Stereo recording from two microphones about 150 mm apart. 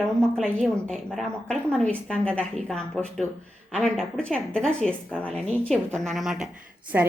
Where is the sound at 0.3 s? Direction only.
5° left (ahead or behind).